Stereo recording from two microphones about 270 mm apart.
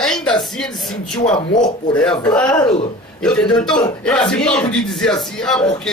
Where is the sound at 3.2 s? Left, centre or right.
Centre.